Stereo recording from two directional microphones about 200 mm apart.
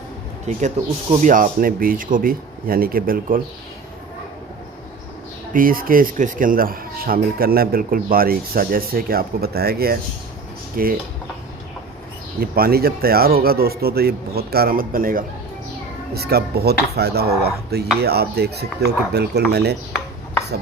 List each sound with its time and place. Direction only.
0.5 s speech: 35° right (ahead or behind)
5.5 s speech: 45° right (ahead or behind)
12.4 s speech: 50° right (ahead or behind)